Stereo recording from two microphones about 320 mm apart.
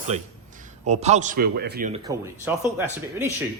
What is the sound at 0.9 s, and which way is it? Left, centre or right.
A man's voice, right.